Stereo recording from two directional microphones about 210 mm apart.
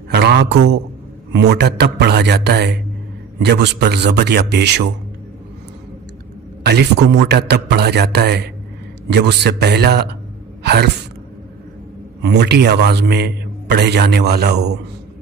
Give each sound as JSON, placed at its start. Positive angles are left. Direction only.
{"t": 0.1, "sound": "a man's voice", "side_deg": -55}
{"t": 6.6, "sound": "a man's voice", "side_deg": -50}
{"t": 10.6, "sound": "gasp", "side_deg": -50}
{"t": 12.2, "sound": "a man's voice", "side_deg": -50}